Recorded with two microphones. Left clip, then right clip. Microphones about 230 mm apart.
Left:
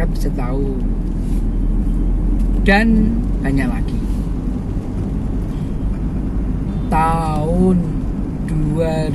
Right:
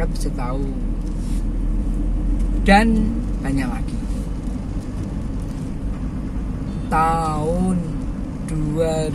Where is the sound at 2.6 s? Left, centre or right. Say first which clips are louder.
Even; centre.